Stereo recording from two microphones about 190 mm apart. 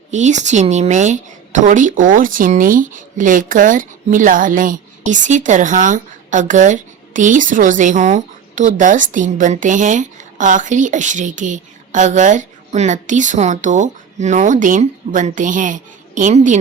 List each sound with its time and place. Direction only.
0.1 s a woman's voice: 40° right (ahead or behind)